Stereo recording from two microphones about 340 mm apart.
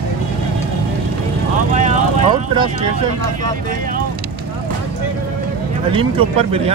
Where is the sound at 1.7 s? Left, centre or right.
Right.